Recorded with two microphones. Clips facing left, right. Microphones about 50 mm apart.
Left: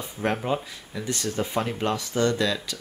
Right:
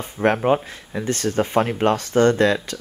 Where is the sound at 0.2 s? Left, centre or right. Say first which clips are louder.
Right 8 dB; right.